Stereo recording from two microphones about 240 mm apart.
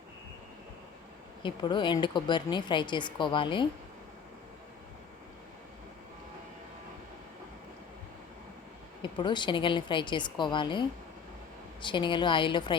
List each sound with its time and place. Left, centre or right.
1.4 s a woman's voice: centre
9.0 s a woman's voice: centre